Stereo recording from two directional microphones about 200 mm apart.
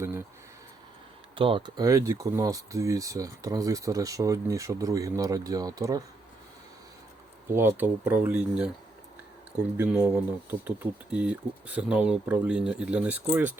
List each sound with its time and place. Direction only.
0.0 s a sound: 15° right (ahead or behind)
1.4 s speech: 25° right (ahead or behind)
7.5 s speech: 10° right (ahead or behind)
9.7 s speech: 10° right (ahead or behind)
11.1 s speech: 5° right (ahead or behind)